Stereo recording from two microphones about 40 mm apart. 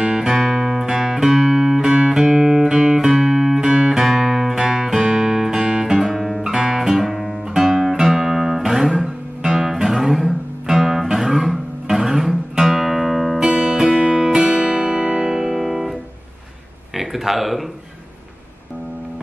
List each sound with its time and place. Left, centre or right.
0.0 s music: centre
3.1 s music: centre
5.0 s guitar: centre
6.0 s guitar: centre
13.4 s music: right
15.3 s music: centre
16.9 s a sound: centre